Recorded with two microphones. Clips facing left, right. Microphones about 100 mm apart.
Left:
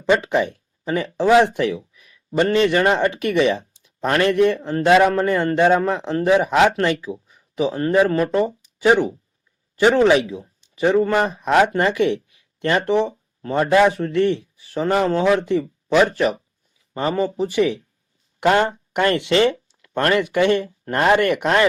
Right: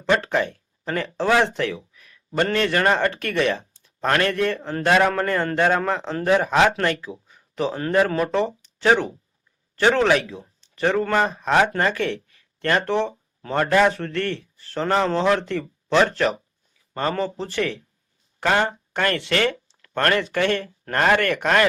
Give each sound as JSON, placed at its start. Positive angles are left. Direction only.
{"t": 0.0, "sound": "speech", "side_deg": 15}
{"t": 10.6, "sound": "a sound", "side_deg": 15}
{"t": 11.0, "sound": "speech", "side_deg": 10}